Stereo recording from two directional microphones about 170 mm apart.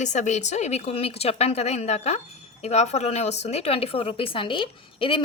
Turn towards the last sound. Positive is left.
turn(degrees=30)  # may be behind; listen again after turning